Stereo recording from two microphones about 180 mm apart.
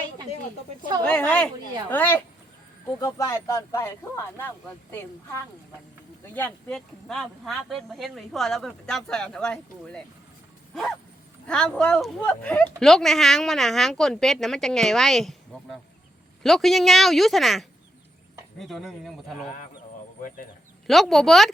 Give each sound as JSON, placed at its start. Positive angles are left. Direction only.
{"t": 1.0, "sound": "speech", "side_deg": 5}
{"t": 11.4, "sound": "speech", "side_deg": 5}
{"t": 20.8, "sound": "speech", "side_deg": 0}